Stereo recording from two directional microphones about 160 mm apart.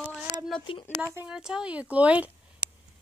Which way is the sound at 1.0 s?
10° right (ahead or behind).